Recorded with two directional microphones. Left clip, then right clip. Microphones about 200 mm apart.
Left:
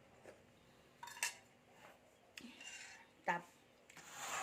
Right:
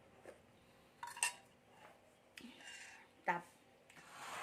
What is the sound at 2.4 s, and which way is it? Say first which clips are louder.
Stir: left 1 dB; 5° right (ahead or behind).